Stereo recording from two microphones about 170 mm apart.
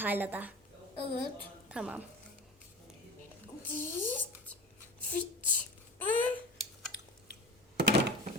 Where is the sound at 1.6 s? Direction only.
5° right (ahead or behind).